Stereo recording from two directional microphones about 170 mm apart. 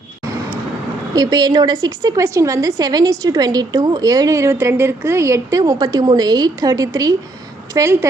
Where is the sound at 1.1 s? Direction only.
25° right (ahead or behind).